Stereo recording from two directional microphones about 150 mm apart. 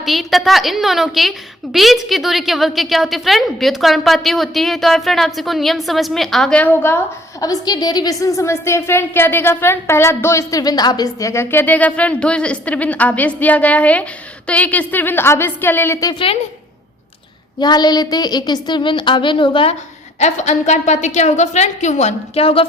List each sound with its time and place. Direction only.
0.0 s a woman's voice: centre (ahead or behind); by 16.1 s 20° left (ahead or behind)
16.1 s a woman's voice: 35° left (ahead or behind)
17.6 s a woman's voice: 30° left (ahead or behind)
20.1 s a woman's voice: 50° left (ahead or behind)